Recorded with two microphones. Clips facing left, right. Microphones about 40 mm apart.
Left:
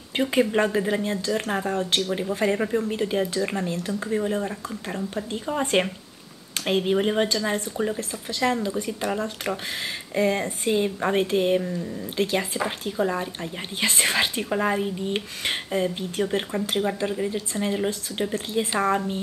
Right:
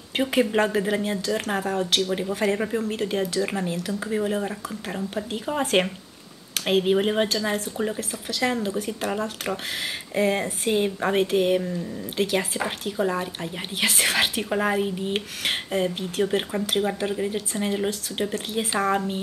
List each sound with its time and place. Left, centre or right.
0.1 s speech: centre
18.9 s speech: centre